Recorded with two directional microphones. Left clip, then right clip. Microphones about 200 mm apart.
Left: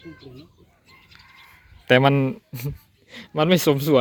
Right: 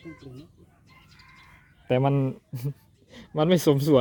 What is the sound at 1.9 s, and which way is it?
Speech, 5° left (ahead or behind).